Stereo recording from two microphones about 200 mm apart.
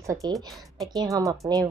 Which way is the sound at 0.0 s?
15° right (ahead or behind).